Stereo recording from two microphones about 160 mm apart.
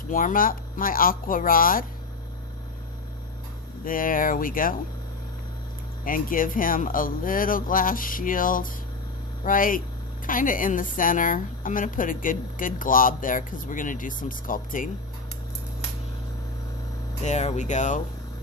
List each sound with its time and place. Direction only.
0.1 s a woman's voice: 55° left (ahead or behind)
3.8 s a woman's voice: 60° left (ahead or behind)
6.1 s a woman's voice: 60° left (ahead or behind)
17.2 s speech: 45° left (ahead or behind)